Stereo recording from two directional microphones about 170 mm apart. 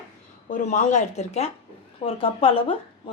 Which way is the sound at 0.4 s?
45° left (ahead or behind).